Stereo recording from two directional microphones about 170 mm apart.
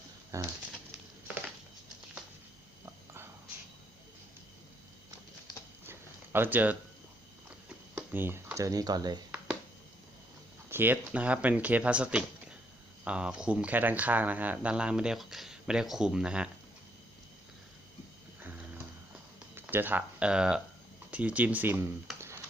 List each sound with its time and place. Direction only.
0.3 s speech: 20° right (ahead or behind)
5.8 s a sound: 15° right (ahead or behind)
7.9 s speech: 10° right (ahead or behind)
10.7 s speech: 10° right (ahead or behind)
19.5 s speech: 10° right (ahead or behind)